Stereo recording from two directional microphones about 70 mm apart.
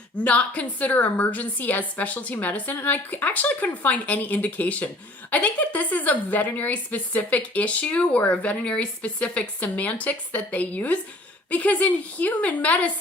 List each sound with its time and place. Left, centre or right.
0.3 s a woman's voice: centre